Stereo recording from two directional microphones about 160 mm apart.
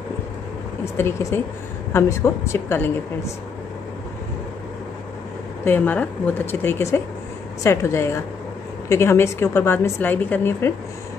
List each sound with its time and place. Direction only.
0.9 s a woman's voice: 15° left (ahead or behind)
5.7 s a woman's voice: 10° left (ahead or behind)